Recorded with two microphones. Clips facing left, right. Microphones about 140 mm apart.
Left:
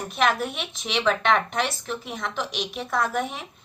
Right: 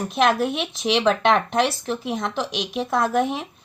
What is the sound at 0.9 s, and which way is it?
Speech, 35° right (ahead or behind).